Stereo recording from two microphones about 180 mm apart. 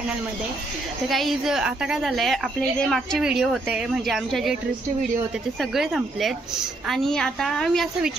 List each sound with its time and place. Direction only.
1.0 s a woman's voice: centre (ahead or behind)
5.6 s a woman's voice: centre (ahead or behind)